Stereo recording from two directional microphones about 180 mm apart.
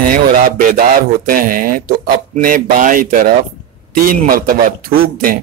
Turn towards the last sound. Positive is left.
turn(degrees=-50)  # may be behind; listen again after turning